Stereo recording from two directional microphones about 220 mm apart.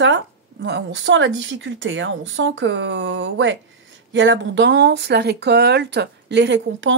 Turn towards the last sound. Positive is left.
turn(degrees=-55)  # may be behind; listen again after turning